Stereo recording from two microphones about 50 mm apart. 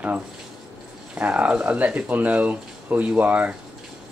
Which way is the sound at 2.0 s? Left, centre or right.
Right.